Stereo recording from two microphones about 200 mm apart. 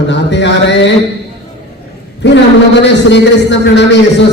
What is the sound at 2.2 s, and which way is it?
A man's voice, 60° left (ahead or behind).